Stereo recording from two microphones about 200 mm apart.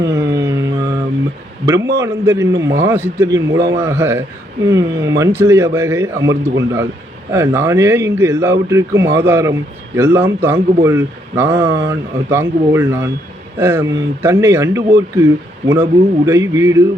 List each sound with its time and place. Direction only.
0.0 s music: 15° right (ahead or behind)
1.6 s speech: 15° right (ahead or behind)